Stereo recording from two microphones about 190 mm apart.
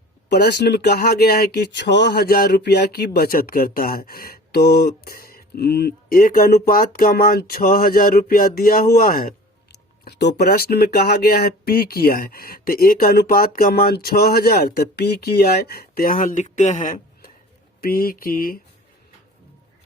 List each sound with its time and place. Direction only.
0.3 s speech: 60° left (ahead or behind)
10.0 s speech: 60° left (ahead or behind); by 16.9 s 40° left (ahead or behind)
17.7 s speech: 50° left (ahead or behind)